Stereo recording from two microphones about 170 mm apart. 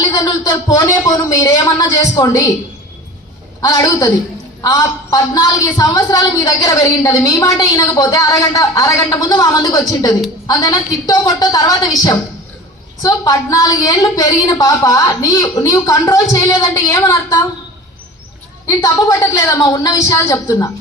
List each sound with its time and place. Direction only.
0.2 s a woman's voice: 20° left (ahead or behind)
3.6 s a woman's voice: 20° left (ahead or behind)
18.6 s a woman's voice: 20° left (ahead or behind)